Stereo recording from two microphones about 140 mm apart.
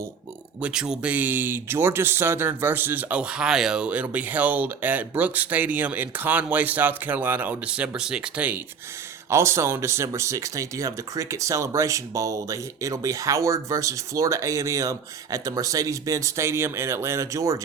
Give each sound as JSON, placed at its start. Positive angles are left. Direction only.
{"t": 0.6, "sound": "speech", "side_deg": -5}